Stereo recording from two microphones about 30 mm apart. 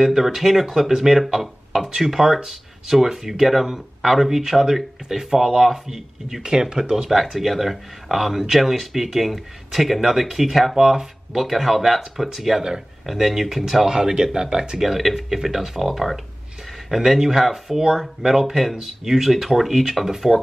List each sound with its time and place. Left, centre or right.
0.0 s speech: centre
6.4 s speech: right
7.1 s speech: centre
13.8 s speech: right
14.8 s speech: centre
20.3 s speech: centre